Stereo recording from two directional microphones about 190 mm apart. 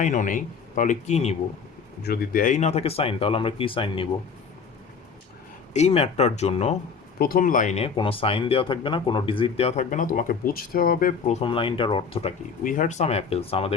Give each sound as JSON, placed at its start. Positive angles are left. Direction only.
{"t": 0.0, "sound": "speech", "side_deg": 40}
{"t": 2.0, "sound": "speech", "side_deg": 50}
{"t": 5.7, "sound": "speech", "side_deg": 35}
{"t": 7.2, "sound": "speech", "side_deg": 50}
{"t": 11.3, "sound": "speech", "side_deg": 25}
{"t": 12.6, "sound": "speech", "side_deg": 45}